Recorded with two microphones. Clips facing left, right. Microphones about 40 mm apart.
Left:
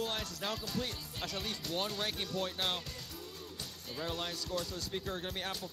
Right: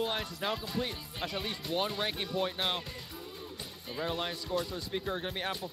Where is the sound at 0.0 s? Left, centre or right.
Right.